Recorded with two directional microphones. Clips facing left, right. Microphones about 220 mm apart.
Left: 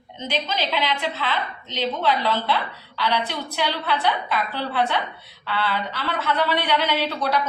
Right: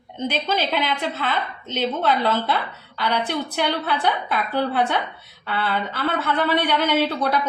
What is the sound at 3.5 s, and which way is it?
A woman's voice, 50° right (ahead or behind).